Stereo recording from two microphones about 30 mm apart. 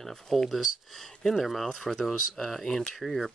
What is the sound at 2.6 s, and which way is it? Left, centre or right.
Speech, centre.